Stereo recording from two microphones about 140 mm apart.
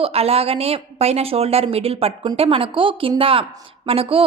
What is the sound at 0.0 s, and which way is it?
Speech, 45° right (ahead or behind).